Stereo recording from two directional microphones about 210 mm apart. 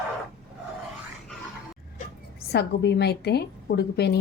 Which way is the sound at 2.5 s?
50° left (ahead or behind).